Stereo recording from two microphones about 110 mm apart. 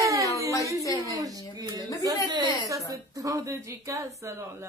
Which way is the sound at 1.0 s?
30° right (ahead or behind).